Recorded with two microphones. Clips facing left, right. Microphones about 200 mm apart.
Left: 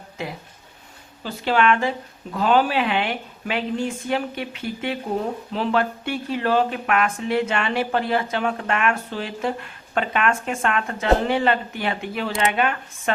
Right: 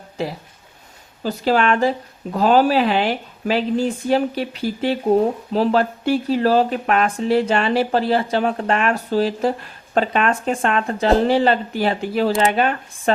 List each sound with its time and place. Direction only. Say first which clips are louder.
0.2 s speech: right 6 dB; 35° right (ahead or behind)